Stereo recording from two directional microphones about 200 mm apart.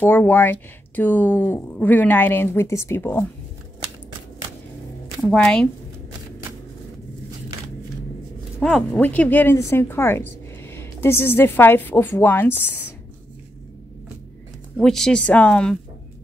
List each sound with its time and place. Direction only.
0.0 s speech: 10° left (ahead or behind)
5.2 s speech: 5° left (ahead or behind)
8.5 s speech: 5° left (ahead or behind)
14.8 s speech: centre (ahead or behind)